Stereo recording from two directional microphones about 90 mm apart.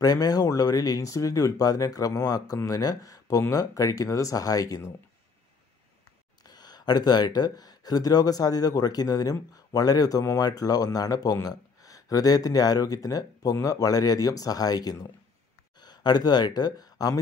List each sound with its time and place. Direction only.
0.0 s speech: 45° left (ahead or behind)
6.4 s speech: 50° left (ahead or behind)